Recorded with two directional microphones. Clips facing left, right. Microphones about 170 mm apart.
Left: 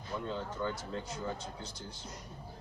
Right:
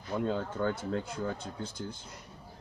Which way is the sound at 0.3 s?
55° right (ahead or behind).